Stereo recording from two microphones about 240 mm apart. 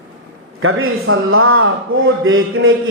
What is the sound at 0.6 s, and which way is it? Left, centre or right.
A man's voice, right.